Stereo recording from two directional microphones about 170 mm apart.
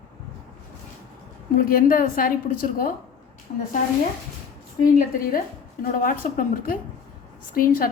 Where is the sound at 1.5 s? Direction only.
55° left (ahead or behind).